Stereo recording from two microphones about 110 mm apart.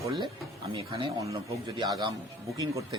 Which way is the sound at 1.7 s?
40° right (ahead or behind).